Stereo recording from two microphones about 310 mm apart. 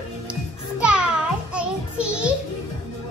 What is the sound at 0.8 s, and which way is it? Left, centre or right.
Music, centre.